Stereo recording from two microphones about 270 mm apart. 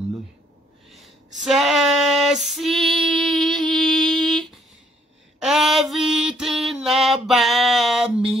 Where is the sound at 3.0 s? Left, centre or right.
Centre.